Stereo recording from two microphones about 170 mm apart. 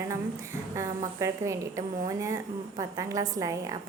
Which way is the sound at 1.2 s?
15° right (ahead or behind).